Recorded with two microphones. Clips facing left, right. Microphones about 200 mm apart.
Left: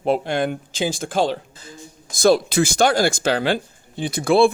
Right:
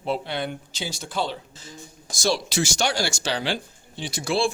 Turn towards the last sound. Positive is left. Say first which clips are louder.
# left 9 dB
turn(degrees=55)  # may be behind; listen again after turning